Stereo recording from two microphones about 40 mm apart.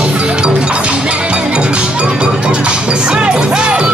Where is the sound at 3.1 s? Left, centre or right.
Right.